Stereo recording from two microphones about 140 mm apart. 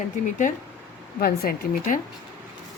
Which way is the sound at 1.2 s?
90° left.